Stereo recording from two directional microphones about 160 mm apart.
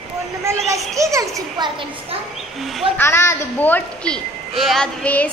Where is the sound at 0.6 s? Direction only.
20° right (ahead or behind).